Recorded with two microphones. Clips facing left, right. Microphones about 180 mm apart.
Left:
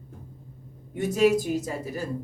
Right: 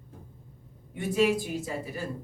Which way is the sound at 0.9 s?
40° left (ahead or behind).